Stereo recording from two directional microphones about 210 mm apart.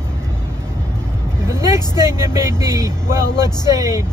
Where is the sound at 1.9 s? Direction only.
20° left (ahead or behind).